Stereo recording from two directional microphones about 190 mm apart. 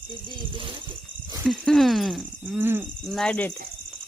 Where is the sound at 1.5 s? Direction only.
Centre (ahead or behind).